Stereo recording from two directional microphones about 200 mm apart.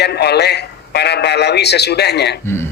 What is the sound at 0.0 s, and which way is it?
Speech, 55° left (ahead or behind).